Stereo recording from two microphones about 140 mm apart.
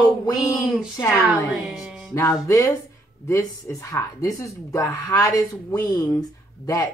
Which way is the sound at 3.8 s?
25° left (ahead or behind).